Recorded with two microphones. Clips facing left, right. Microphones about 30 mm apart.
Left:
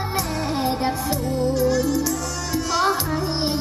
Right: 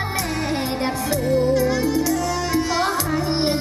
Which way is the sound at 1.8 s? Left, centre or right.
Right.